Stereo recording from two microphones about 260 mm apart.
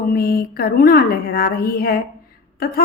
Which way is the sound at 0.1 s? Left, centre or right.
Left.